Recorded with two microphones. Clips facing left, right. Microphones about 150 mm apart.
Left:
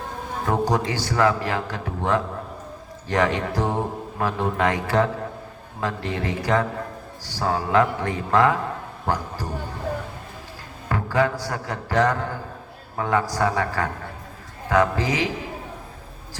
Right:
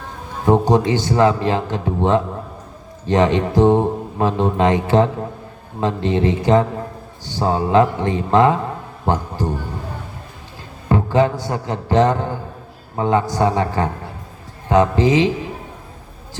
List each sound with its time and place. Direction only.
0.4 s a man's voice: 25° right (ahead or behind)
10.8 s music: 25° right (ahead or behind)
13.0 s a man's voice: 25° right (ahead or behind)